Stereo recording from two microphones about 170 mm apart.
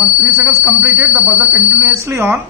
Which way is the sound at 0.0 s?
10° right (ahead or behind).